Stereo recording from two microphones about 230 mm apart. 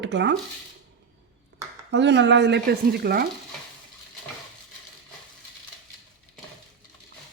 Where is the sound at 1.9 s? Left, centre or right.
Right.